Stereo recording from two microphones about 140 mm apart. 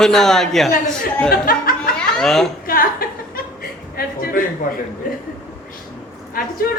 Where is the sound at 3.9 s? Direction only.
90° left.